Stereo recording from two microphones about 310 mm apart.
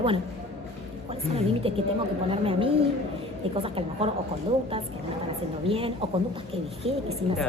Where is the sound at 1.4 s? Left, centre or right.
Centre.